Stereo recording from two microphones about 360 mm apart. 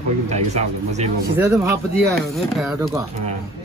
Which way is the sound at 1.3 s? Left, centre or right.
Centre.